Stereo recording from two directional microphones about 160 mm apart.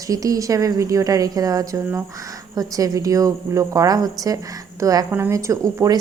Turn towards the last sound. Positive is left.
turn(degrees=-20)  # may be behind; listen again after turning